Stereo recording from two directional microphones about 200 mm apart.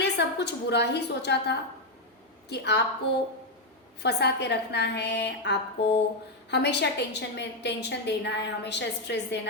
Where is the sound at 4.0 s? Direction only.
55° left (ahead or behind).